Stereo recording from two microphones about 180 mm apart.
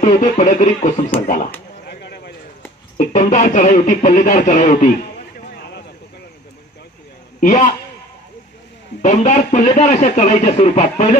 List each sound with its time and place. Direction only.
0.0 s speech: 40° left (ahead or behind)
1.9 s a sound: 65° left (ahead or behind)
3.0 s speech: 45° left (ahead or behind)
5.6 s a sound: 70° left (ahead or behind)
7.3 s a man's voice: 45° left (ahead or behind)
9.0 s speech: 40° left (ahead or behind)